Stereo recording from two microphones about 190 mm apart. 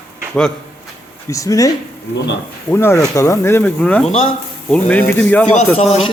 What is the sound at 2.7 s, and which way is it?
Speech, 15° left (ahead or behind).